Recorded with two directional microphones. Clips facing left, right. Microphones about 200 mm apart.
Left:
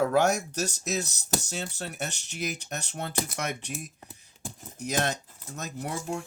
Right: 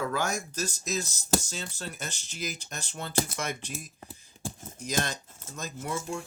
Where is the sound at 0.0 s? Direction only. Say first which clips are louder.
Left 7 dB; 65° left (ahead or behind).